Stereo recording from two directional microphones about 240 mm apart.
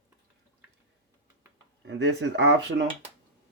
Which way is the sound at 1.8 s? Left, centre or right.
Right.